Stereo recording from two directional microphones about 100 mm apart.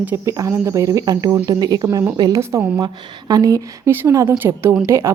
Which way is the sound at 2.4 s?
25° right (ahead or behind).